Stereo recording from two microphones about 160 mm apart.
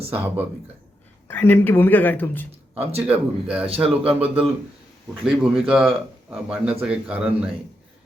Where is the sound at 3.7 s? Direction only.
35° right (ahead or behind).